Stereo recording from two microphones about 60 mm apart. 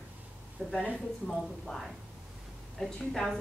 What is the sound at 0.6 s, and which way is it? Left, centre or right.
Speech, centre.